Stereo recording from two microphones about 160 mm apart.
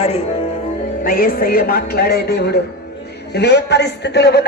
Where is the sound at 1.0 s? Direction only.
65° left (ahead or behind); by 4.4 s 90° left.